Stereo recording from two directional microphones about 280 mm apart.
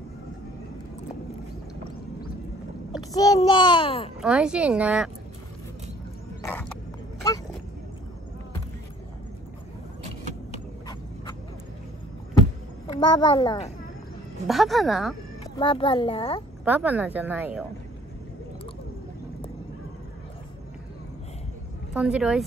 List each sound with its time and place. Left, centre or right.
3.1 s a child's voice: centre
4.2 s speech: centre
6.4 s horse: centre
13.0 s a child's voice: centre
14.5 s speech: centre
15.5 s a child's voice: centre
16.6 s a woman's voice: centre
21.9 s speech: centre